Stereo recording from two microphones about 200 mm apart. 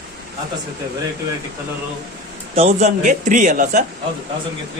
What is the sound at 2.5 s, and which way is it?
A man's voice, 35° right (ahead or behind).